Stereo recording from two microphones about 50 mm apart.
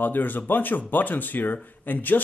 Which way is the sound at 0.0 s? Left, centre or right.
Left.